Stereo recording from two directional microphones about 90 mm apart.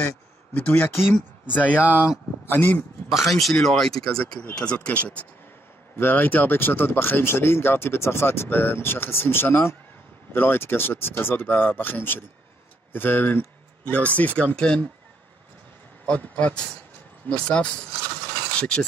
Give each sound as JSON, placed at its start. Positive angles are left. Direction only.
{"t": 0.6, "sound": "speech", "side_deg": 15}
{"t": 1.8, "sound": "speech", "side_deg": -15}
{"t": 2.0, "sound": "a man's voice", "side_deg": 25}
{"t": 3.1, "sound": "speech", "side_deg": 0}
{"t": 16.1, "sound": "speech", "side_deg": 15}